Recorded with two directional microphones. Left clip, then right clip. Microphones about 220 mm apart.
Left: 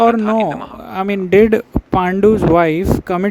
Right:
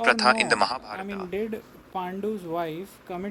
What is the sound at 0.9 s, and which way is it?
Speech, 50° left (ahead or behind).